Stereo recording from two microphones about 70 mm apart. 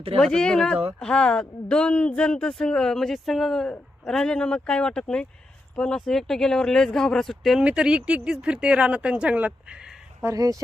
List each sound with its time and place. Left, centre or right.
0.2 s speech: centre
7.6 s speech: centre
10.3 s speech: right